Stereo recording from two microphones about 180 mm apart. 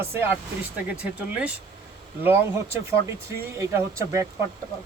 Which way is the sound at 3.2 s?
15° right (ahead or behind).